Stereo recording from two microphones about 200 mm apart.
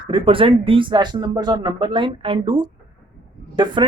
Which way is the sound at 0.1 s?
25° right (ahead or behind).